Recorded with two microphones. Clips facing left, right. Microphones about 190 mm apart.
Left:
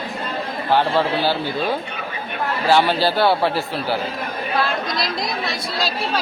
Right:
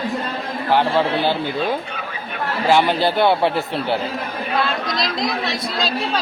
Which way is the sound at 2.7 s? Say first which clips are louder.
Right 1 dB; 15° right (ahead or behind).